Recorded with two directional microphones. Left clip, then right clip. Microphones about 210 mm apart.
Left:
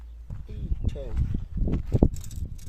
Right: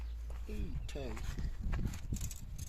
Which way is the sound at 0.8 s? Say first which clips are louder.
Left 8 dB; 45° left (ahead or behind).